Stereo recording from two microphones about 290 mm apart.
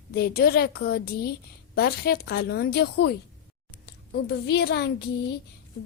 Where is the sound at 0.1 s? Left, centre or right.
Left.